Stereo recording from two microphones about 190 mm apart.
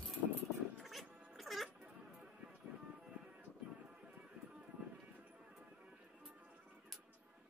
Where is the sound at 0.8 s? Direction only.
Centre (ahead or behind).